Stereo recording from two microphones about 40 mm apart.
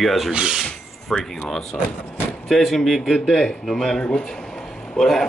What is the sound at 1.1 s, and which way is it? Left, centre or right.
Speech, centre.